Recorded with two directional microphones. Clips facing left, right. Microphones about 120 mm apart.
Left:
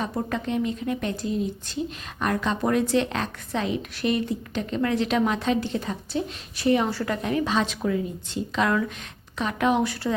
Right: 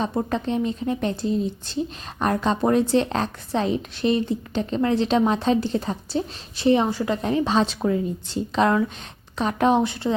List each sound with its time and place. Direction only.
0.0 s a woman's voice: 30° right (ahead or behind)
7.2 s a woman's voice: 30° right (ahead or behind)